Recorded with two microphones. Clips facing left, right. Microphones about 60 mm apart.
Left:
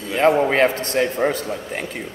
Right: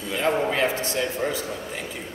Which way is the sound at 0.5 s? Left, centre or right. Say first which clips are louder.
Left 6 dB; left.